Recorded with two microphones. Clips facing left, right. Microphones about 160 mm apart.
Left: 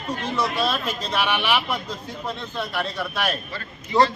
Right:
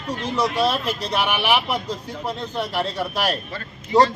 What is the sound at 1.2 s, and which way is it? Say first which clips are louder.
Speech: right 2 dB; 10° right (ahead or behind).